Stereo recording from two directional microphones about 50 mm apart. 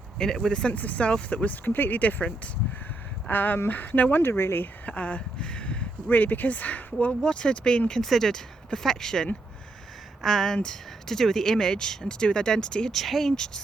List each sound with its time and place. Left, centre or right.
0.2 s speech: centre
0.7 s speech: left
1.6 s speech: left
3.2 s speech: left
4.2 s speech: left
4.9 s speech: left
6.1 s speech: left; by 8.0 s centre
8.0 s speech: centre
13.0 s speech: centre